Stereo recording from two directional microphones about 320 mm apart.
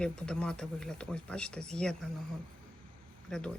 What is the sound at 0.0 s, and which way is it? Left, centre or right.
Speech, centre.